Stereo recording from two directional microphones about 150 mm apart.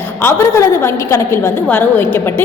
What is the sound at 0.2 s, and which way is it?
A woman's voice, 15° left (ahead or behind).